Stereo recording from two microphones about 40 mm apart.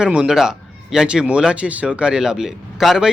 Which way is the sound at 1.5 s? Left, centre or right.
Right.